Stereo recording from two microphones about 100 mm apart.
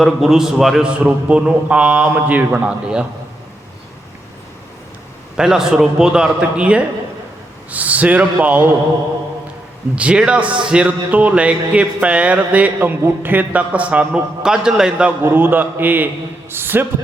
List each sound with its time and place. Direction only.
0.0 s a man's voice: 5° right (ahead or behind)
5.4 s a man's voice: 5° right (ahead or behind)
9.9 s a man's voice: 10° right (ahead or behind)